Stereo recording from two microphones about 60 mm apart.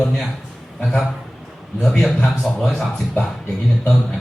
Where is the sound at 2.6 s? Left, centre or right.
Centre.